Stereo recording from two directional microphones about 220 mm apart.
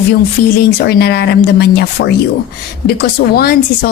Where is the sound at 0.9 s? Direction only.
50° left (ahead or behind).